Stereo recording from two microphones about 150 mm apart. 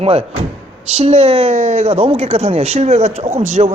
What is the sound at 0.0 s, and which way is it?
Speech, 40° right (ahead or behind).